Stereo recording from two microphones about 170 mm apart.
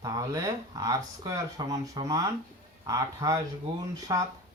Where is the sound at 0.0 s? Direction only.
20° right (ahead or behind).